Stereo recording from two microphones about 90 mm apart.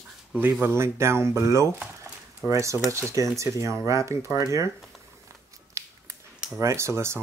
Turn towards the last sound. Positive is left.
turn(degrees=-30)  # may be behind; listen again after turning